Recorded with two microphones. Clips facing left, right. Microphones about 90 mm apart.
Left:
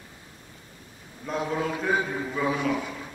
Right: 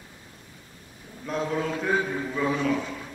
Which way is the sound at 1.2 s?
5° left (ahead or behind).